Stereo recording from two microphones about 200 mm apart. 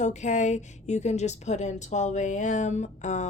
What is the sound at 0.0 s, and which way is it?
Speech, 35° left (ahead or behind).